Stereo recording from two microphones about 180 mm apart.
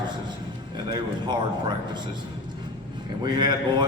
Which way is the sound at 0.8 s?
25° right (ahead or behind).